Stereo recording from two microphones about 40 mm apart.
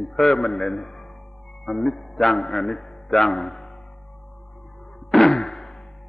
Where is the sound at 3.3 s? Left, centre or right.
Centre.